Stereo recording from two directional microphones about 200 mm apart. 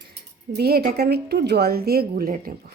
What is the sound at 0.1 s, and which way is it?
A woman's voice, 55° right (ahead or behind).